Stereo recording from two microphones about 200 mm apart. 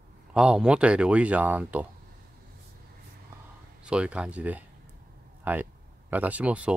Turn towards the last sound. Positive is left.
turn(degrees=-5)  # may be behind; listen again after turning